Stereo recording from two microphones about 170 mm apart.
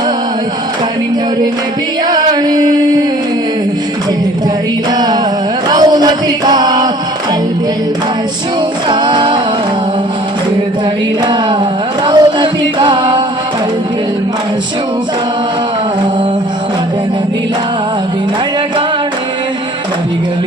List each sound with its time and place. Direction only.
2.0 s singing: 25° right (ahead or behind)
5.6 s chant: 25° right (ahead or behind)
8.9 s a capella: 30° right (ahead or behind)
12.0 s singing: 25° right (ahead or behind)